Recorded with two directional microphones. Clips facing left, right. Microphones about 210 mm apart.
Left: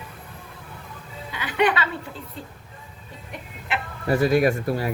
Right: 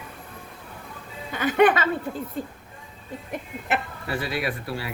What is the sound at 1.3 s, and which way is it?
Speech, 45° right (ahead or behind).